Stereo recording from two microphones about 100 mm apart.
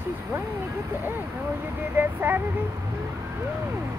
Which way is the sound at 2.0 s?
20° right (ahead or behind).